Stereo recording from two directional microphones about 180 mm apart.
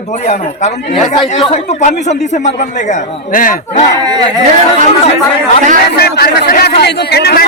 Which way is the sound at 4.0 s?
20° right (ahead or behind).